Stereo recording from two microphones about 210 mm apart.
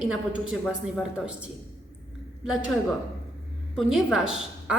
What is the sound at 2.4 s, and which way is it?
Speech, centre (ahead or behind).